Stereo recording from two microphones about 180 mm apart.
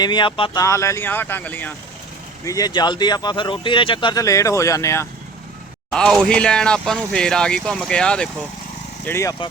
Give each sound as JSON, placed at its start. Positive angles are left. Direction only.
{"t": 0.0, "sound": "speech", "side_deg": 25}
{"t": 0.6, "sound": "speech", "side_deg": 15}
{"t": 2.4, "sound": "speech", "side_deg": 20}
{"t": 5.9, "sound": "speech", "side_deg": 5}